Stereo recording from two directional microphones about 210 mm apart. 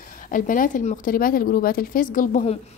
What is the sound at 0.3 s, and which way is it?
Speech, 40° left (ahead or behind).